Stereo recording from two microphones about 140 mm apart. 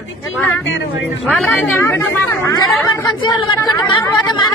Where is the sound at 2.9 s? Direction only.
30° left (ahead or behind).